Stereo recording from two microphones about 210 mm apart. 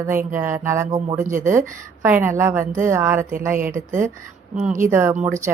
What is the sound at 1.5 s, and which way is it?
Speech, 10° right (ahead or behind).